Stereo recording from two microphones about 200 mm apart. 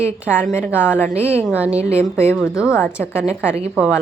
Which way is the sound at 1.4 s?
5° right (ahead or behind).